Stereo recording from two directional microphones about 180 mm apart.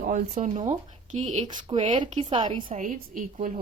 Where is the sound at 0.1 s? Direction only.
45° right (ahead or behind); by 2.7 s 30° right (ahead or behind).